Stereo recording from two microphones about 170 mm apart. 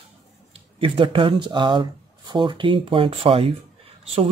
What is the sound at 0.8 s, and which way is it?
Speech, 30° right (ahead or behind).